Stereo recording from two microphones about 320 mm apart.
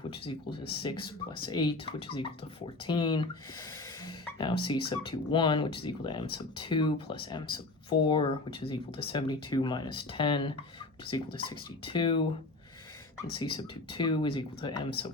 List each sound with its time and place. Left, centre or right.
0.1 s speech: centre
13.3 s speech: centre